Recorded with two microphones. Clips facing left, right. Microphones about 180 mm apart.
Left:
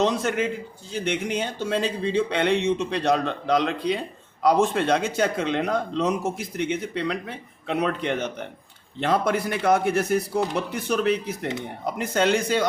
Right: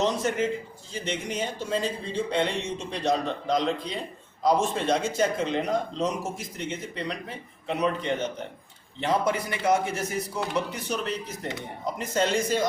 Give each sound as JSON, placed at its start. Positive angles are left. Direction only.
{"t": 0.0, "sound": "speech", "side_deg": 65}